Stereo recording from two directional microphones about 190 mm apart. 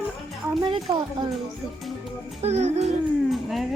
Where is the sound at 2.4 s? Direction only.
35° right (ahead or behind).